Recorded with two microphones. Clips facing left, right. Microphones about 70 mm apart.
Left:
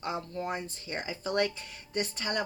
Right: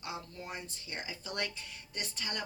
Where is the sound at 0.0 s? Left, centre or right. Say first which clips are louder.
Left 8 dB; left.